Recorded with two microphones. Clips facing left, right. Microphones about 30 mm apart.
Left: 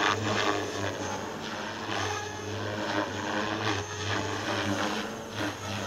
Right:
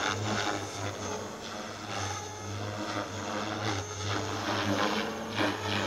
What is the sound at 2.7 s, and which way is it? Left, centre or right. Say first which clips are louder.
Vehicle: left 5 dB; left.